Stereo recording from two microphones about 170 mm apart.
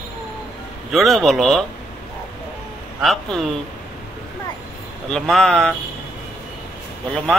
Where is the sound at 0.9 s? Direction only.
Centre (ahead or behind).